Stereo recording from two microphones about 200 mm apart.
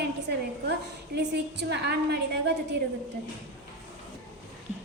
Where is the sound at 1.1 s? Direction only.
55° right (ahead or behind).